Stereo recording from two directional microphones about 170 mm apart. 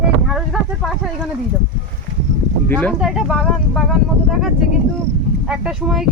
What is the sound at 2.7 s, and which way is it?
Speech, 10° left (ahead or behind).